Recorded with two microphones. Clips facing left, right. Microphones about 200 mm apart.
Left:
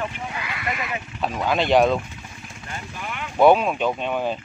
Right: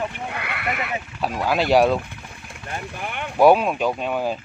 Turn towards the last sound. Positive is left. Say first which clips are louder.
# right 1 dB
turn(degrees=-5)  # may be behind; listen again after turning